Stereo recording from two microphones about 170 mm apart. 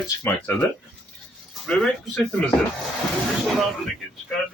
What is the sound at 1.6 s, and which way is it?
Speech, centre (ahead or behind).